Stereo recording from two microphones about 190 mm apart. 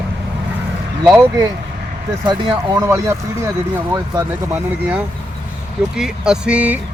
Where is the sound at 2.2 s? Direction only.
25° right (ahead or behind).